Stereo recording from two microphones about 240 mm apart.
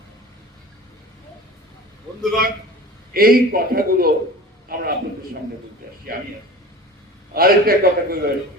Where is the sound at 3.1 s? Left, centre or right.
Right.